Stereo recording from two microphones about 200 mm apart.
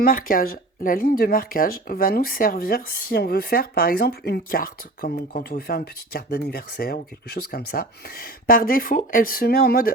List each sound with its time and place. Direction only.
0.0 s speech: 45° left (ahead or behind)